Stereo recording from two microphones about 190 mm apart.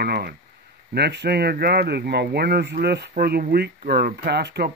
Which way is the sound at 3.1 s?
50° right (ahead or behind).